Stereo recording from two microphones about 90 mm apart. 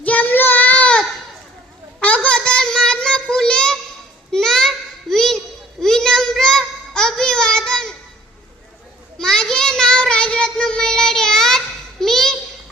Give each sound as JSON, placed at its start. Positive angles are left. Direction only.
{"t": 0.0, "sound": "child singing", "side_deg": 15}
{"t": 9.1, "sound": "child singing", "side_deg": 5}